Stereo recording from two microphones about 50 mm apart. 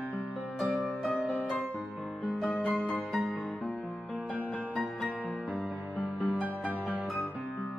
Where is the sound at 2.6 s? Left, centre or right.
Left.